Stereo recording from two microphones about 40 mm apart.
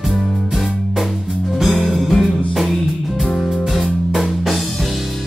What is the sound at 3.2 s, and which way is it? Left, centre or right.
Music, centre.